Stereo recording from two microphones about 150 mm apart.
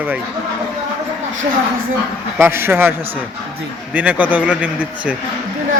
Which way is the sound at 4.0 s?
10° right (ahead or behind).